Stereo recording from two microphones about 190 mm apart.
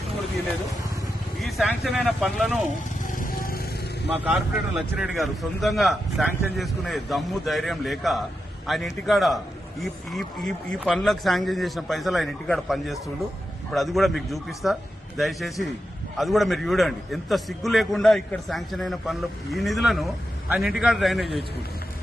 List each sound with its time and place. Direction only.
1.4 s speech: centre (ahead or behind)
3.0 s vehicle: 45° left (ahead or behind)
4.1 s speech: 5° right (ahead or behind)